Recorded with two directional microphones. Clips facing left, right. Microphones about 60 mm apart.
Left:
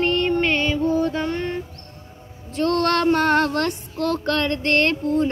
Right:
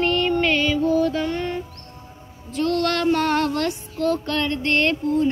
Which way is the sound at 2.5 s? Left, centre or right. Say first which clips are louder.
Left 2 dB; left.